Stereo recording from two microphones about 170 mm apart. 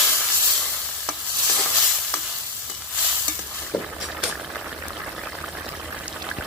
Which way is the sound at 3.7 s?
25° left (ahead or behind).